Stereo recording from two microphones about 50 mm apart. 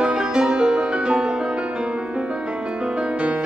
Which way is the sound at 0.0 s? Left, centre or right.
Centre.